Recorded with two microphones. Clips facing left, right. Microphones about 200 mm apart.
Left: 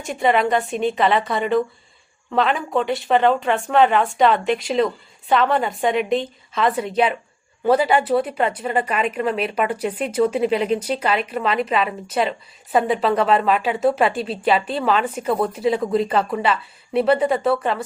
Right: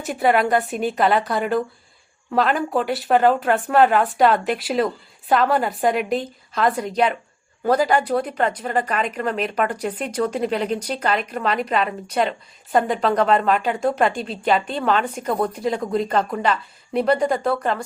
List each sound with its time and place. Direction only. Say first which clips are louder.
0.0 s a woman's voice: even; 5° right (ahead or behind)